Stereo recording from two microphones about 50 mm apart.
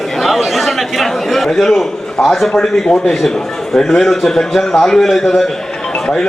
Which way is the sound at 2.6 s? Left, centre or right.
Centre.